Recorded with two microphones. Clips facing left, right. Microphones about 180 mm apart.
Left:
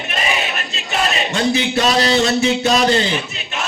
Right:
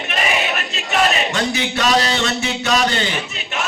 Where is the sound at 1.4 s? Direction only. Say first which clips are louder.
Left 4 dB; 30° left (ahead or behind).